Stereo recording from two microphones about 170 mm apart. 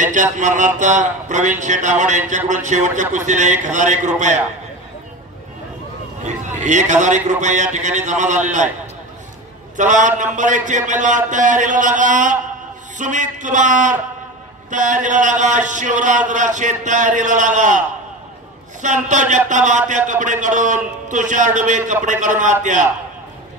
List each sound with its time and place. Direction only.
0.0 s speech: 45° right (ahead or behind)
6.2 s speech: 45° right (ahead or behind)
9.8 s speech: 45° right (ahead or behind)